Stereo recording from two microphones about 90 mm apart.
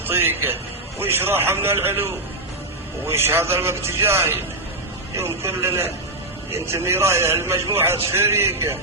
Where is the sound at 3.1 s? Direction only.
25° right (ahead or behind).